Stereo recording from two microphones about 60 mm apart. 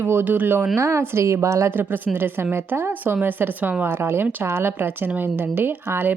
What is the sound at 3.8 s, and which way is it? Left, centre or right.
Speech, right.